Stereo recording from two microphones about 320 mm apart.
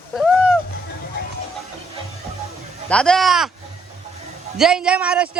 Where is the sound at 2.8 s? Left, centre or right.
Centre.